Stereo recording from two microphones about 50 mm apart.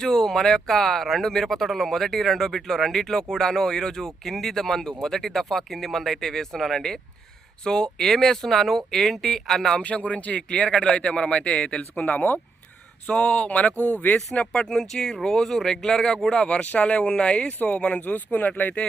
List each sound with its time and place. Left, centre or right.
0.0 s speech: centre
9.8 s a man's voice: left
13.1 s a man's voice: left
14.3 s a man's voice: centre
18.0 s speech: left